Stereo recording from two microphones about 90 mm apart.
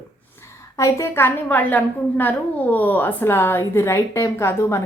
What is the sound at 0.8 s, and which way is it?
A woman's voice, 35° left (ahead or behind).